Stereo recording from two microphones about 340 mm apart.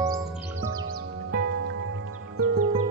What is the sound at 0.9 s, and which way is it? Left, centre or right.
Music, right.